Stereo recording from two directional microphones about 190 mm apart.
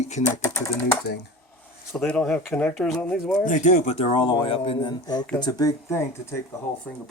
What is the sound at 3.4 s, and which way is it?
Speech, 45° left (ahead or behind).